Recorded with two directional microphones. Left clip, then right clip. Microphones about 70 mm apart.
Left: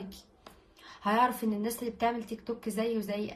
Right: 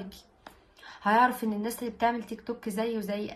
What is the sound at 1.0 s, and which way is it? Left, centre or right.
A woman's voice, right.